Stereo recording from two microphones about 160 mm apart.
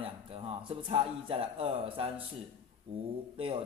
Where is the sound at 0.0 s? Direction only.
35° right (ahead or behind).